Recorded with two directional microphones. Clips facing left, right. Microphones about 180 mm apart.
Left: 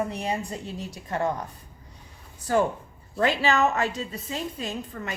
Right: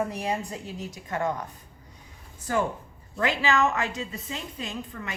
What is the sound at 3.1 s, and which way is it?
A woman's voice, 35° left (ahead or behind).